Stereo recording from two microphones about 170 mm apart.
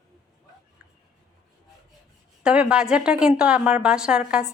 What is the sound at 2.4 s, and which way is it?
A woman's voice, 5° right (ahead or behind).